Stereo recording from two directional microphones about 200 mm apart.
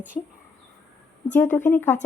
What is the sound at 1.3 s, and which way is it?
Speech, 10° left (ahead or behind).